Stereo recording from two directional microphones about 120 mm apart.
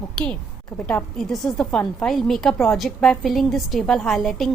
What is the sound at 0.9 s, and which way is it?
A woman's voice, 5° left (ahead or behind).